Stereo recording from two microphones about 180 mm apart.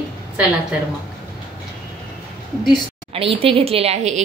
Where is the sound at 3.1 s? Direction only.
30° right (ahead or behind).